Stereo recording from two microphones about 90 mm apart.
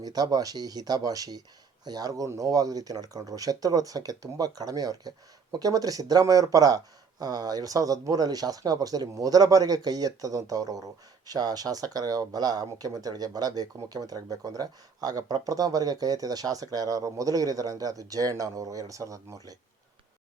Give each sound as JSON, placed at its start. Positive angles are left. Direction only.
{"t": 0.0, "sound": "speech", "side_deg": -45}